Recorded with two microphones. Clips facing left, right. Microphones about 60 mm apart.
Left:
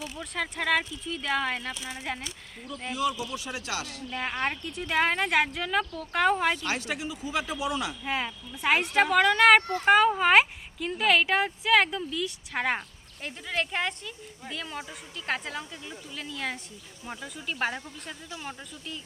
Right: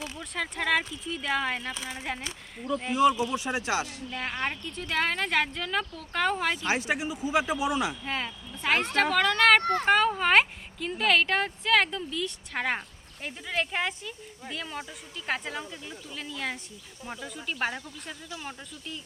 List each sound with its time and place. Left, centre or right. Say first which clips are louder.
0.2 s speech: left 1 dB; centre
2.9 s speech: right 6 dB; right
4.1 s speech: left 3 dB; centre
6.7 s speech: right 3 dB; right
8.0 s speech: left 2 dB; centre